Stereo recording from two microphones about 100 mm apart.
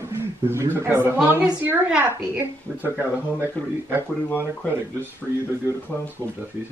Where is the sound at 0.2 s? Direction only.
25° right (ahead or behind).